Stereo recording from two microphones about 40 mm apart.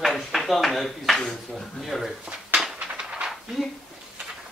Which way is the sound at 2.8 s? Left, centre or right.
Right.